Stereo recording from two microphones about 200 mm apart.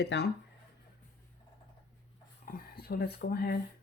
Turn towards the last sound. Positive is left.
turn(degrees=50)  # may be behind; listen again after turning